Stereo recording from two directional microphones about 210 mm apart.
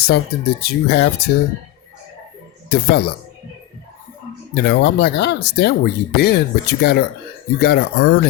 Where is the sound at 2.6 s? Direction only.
50° left (ahead or behind).